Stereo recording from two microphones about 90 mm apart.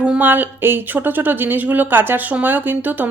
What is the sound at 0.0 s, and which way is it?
A woman's voice, 15° right (ahead or behind).